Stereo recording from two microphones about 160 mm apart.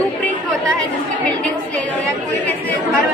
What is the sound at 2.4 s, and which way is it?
Speech, 10° left (ahead or behind).